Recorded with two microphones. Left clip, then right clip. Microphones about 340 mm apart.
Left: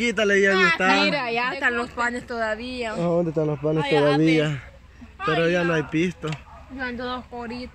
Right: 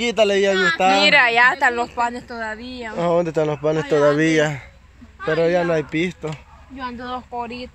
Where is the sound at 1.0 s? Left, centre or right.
Right.